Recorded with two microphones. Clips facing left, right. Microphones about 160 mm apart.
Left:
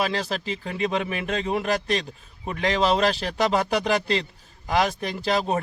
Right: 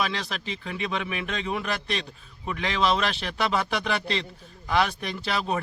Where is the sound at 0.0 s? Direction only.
35° left (ahead or behind).